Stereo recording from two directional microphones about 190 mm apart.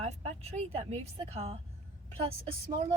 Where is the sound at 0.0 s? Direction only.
35° right (ahead or behind).